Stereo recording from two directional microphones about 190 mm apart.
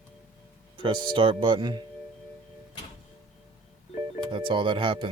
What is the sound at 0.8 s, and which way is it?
Speech, 25° right (ahead or behind).